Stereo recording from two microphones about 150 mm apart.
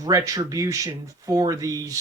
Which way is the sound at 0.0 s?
25° right (ahead or behind).